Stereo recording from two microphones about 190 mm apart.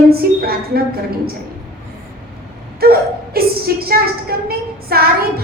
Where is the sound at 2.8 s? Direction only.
55° right (ahead or behind).